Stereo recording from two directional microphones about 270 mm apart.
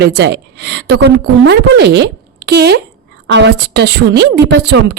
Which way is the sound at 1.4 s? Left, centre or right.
Right.